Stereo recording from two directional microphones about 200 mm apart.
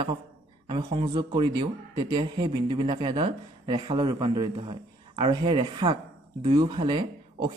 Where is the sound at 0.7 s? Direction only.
25° right (ahead or behind).